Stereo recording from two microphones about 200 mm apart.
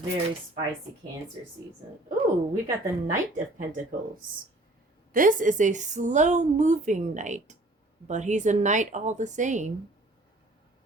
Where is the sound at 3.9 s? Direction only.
45° right (ahead or behind).